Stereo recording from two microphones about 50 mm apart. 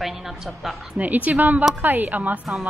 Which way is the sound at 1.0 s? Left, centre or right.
Right.